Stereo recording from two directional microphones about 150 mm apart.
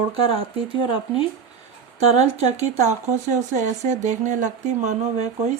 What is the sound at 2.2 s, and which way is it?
Speech, 45° right (ahead or behind).